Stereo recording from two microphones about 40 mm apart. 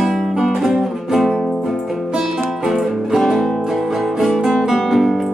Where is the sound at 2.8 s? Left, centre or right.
Centre.